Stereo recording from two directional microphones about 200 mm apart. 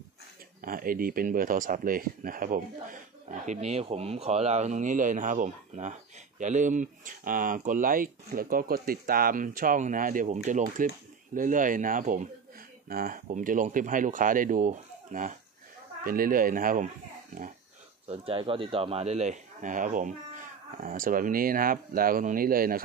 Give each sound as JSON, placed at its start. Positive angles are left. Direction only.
{"t": 0.6, "sound": "speech", "side_deg": -45}
{"t": 18.0, "sound": "speech", "side_deg": -30}